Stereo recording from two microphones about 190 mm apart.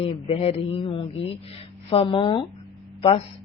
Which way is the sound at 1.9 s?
25° left (ahead or behind).